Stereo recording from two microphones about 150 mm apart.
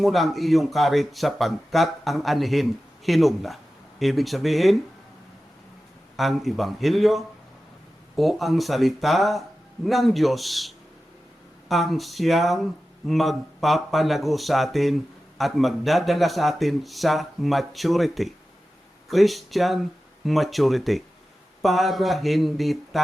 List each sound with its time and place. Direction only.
0.0 s speech: centre (ahead or behind)
6.1 s speech: centre (ahead or behind)